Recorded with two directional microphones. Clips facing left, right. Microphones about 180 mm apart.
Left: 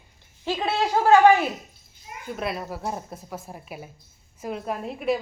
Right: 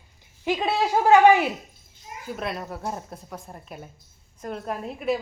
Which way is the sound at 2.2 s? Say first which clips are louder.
Left 1 dB; centre (ahead or behind).